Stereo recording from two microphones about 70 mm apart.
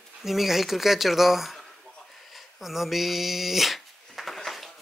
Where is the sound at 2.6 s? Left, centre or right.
Centre.